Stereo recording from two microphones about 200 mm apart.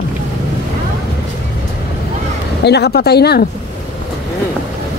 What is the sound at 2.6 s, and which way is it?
Speech, 55° left (ahead or behind).